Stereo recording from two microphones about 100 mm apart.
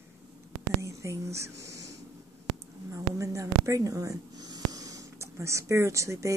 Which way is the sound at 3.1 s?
30° right (ahead or behind).